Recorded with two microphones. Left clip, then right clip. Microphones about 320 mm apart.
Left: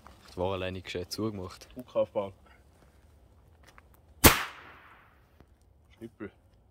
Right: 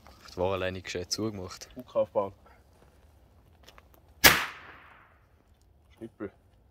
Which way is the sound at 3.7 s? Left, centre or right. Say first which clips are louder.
Right 2 dB; right.